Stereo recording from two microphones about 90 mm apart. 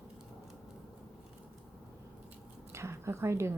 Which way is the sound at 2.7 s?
30° right (ahead or behind).